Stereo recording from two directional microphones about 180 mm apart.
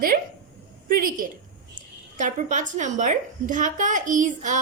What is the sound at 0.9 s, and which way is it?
A woman's voice, 50° right (ahead or behind).